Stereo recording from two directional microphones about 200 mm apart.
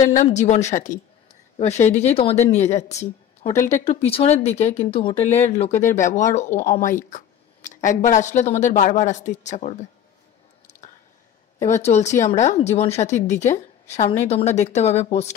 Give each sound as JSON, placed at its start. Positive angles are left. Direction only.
{"t": 0.0, "sound": "speech", "side_deg": 40}
{"t": 6.4, "sound": "speech", "side_deg": 15}
{"t": 7.0, "sound": "speech", "side_deg": 40}
{"t": 11.8, "sound": "speech", "side_deg": 35}